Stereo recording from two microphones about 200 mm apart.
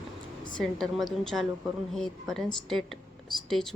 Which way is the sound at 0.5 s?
Centre (ahead or behind).